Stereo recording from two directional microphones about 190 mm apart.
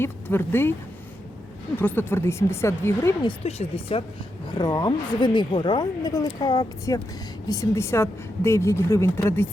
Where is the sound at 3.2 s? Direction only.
30° left (ahead or behind).